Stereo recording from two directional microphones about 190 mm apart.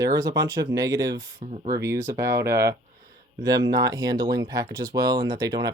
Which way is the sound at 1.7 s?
15° right (ahead or behind).